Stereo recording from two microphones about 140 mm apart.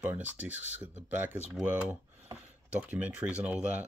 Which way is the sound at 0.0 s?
10° right (ahead or behind).